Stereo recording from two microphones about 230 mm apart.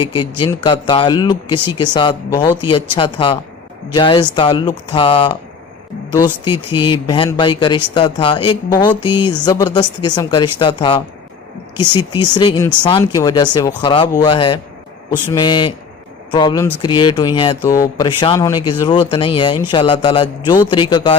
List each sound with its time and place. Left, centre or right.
0.0 s speech: left